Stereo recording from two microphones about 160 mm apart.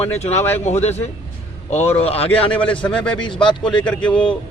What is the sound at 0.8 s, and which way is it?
A man's voice, 45° left (ahead or behind).